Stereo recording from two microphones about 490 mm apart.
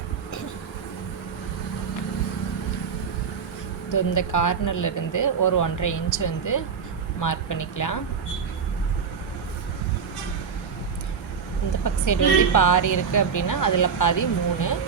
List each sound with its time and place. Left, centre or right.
3.8 s a woman's voice: left
11.8 s a woman's voice: left